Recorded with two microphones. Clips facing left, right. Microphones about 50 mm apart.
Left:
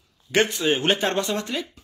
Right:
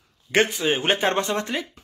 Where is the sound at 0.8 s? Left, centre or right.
Right.